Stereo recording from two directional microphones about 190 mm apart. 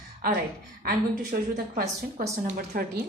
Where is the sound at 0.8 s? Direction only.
45° right (ahead or behind).